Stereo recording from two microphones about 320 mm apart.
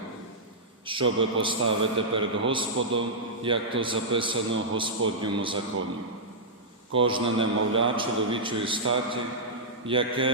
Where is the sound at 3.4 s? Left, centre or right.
Centre.